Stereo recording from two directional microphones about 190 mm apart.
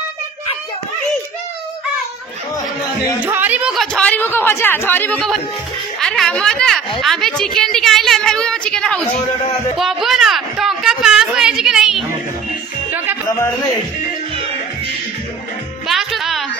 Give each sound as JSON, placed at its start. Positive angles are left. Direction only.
{"t": 3.3, "sound": "a woman's voice", "side_deg": -10}
{"t": 9.2, "sound": "speech", "side_deg": 30}
{"t": 9.8, "sound": "a sound", "side_deg": 0}
{"t": 12.9, "sound": "music", "side_deg": -10}
{"t": 15.9, "sound": "music", "side_deg": 0}